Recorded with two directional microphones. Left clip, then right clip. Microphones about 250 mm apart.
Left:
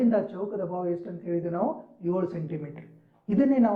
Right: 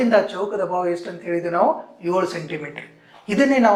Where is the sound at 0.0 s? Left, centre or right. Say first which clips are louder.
Right 9 dB; centre.